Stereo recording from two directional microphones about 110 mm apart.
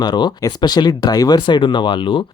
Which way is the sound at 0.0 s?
45° left (ahead or behind).